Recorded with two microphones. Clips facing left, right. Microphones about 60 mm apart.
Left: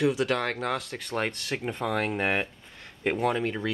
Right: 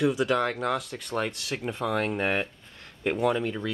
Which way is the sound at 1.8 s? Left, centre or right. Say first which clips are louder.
Right 1 dB; centre.